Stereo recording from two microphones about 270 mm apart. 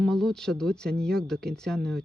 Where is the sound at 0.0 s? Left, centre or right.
Centre.